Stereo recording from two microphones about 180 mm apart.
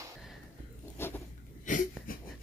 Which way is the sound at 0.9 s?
10° left (ahead or behind).